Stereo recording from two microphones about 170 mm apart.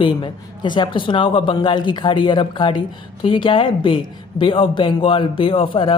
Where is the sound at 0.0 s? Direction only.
25° left (ahead or behind).